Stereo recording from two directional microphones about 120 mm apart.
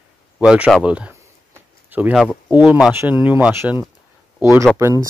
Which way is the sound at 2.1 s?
5° left (ahead or behind).